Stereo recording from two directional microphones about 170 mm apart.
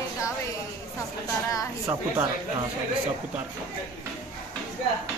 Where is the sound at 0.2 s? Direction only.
20° left (ahead or behind).